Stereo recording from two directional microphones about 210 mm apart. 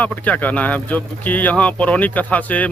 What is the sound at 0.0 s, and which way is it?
Speech, 5° left (ahead or behind).